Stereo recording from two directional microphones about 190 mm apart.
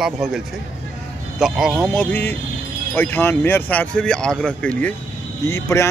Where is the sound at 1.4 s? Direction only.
Centre (ahead or behind).